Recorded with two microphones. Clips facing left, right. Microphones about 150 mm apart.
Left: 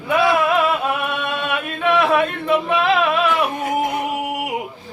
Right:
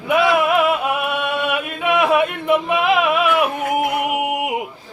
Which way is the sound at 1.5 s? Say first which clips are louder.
Even; 10° right (ahead or behind).